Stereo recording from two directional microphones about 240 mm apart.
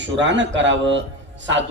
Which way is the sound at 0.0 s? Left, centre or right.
Right.